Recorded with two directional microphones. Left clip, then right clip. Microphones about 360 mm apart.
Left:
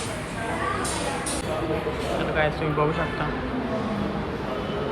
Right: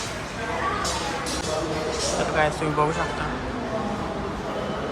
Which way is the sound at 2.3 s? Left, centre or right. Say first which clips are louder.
Right 1 dB; centre.